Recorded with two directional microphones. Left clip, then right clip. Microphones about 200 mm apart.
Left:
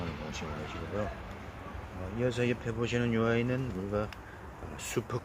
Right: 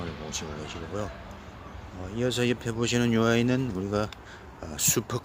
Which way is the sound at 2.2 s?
45° right (ahead or behind).